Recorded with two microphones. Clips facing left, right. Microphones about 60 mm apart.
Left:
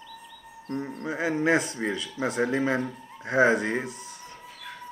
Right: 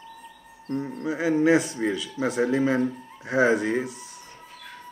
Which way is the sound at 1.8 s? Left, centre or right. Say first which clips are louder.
Right 3 dB; centre.